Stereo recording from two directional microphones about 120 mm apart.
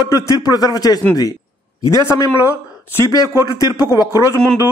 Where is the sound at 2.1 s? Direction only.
25° left (ahead or behind).